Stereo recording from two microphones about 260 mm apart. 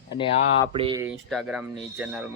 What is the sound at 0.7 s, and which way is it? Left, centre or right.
Speech, centre.